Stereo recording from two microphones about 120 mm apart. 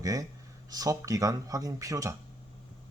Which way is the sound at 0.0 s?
30° right (ahead or behind).